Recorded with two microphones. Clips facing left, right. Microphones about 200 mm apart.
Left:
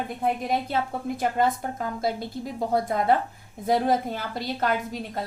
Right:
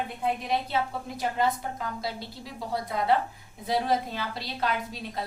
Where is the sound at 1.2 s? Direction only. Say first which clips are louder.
Left 3 dB; 50° left (ahead or behind).